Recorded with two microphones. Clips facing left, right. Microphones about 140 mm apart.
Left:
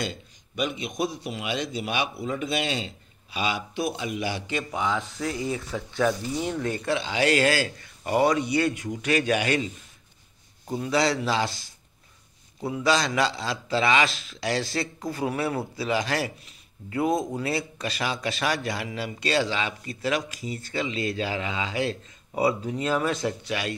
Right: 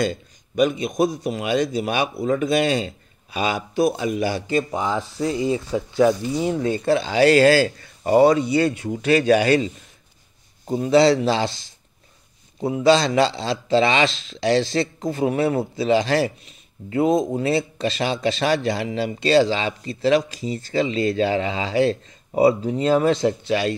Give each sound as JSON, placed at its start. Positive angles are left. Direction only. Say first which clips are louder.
{"t": 0.0, "sound": "a man's voice", "louder": "right 9 dB", "side_deg": -45}
{"t": 10.7, "sound": "a man's voice", "louder": "right 9 dB", "side_deg": -25}